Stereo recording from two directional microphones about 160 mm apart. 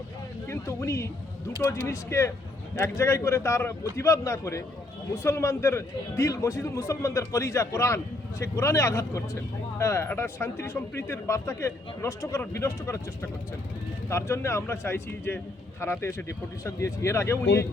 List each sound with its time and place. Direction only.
0.4 s a man's voice: 15° left (ahead or behind)